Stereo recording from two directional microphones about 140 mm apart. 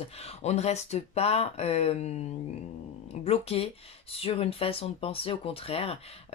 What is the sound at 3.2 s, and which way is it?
Speech, 45° left (ahead or behind).